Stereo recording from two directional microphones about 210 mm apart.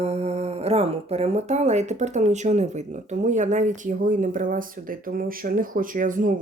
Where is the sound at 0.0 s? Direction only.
30° right (ahead or behind).